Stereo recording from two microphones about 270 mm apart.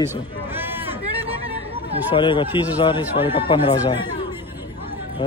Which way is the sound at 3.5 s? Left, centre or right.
Centre.